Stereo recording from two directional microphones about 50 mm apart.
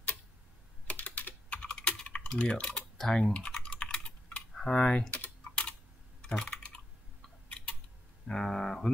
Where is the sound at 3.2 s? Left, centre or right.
Left.